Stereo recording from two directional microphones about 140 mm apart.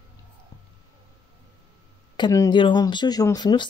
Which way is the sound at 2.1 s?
30° left (ahead or behind).